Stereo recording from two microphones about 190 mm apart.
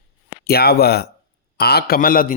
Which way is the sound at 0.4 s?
55° left (ahead or behind).